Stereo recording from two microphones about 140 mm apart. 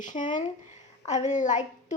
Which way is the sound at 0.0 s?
65° left (ahead or behind).